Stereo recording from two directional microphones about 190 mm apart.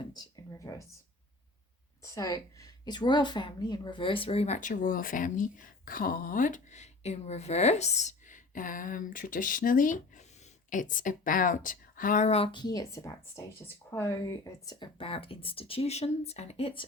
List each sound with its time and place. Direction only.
0.0 s speech: 20° left (ahead or behind)
2.0 s a woman's voice: 15° left (ahead or behind)